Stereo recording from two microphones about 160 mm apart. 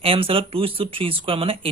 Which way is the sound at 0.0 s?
35° right (ahead or behind).